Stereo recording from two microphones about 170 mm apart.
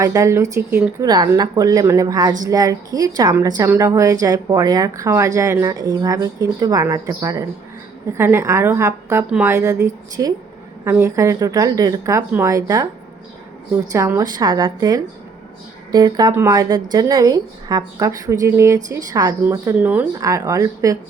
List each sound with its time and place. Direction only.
0.0 s a woman's voice: 20° right (ahead or behind)
13.9 s a woman's voice: 20° right (ahead or behind)